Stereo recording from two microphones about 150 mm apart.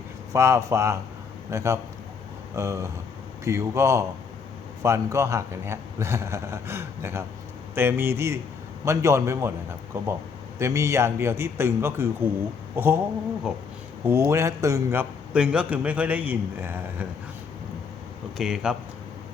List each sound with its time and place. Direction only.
0.3 s a man's voice: 20° right (ahead or behind)
10.6 s a man's voice: 20° right (ahead or behind)
13.5 s speech: 5° right (ahead or behind)
14.0 s a man's voice: 15° right (ahead or behind)
18.3 s speech: 5° right (ahead or behind)